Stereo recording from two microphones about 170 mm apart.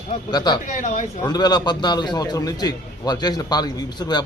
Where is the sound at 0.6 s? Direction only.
50° left (ahead or behind).